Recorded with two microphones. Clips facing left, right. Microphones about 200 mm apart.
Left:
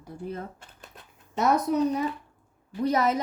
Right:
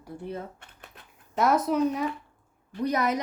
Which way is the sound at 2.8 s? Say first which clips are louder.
Left 2 dB; 30° left (ahead or behind).